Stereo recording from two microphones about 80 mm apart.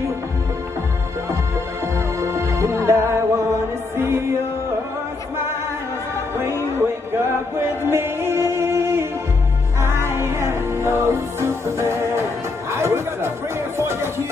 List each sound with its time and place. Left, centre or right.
2.0 s music: right
7.9 s music: right